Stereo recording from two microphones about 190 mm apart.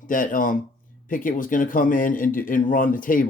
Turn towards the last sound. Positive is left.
turn(degrees=45)  # may be behind; listen again after turning